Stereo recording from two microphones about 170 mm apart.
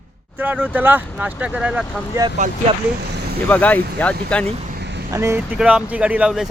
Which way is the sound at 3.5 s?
10° left (ahead or behind).